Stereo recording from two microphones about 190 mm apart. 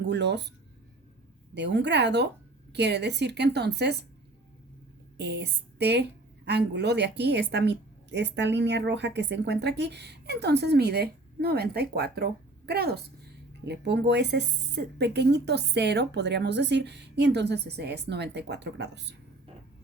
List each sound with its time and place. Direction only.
0.0 s speech: 60° right (ahead or behind)
1.5 s a woman's voice: 65° right (ahead or behind)
5.1 s a woman's voice: 60° right (ahead or behind)